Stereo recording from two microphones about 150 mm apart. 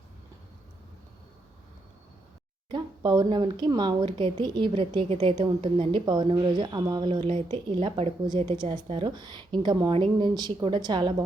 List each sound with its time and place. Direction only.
2.6 s speech: 30° right (ahead or behind)